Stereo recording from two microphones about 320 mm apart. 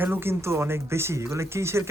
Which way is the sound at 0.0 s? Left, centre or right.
Centre.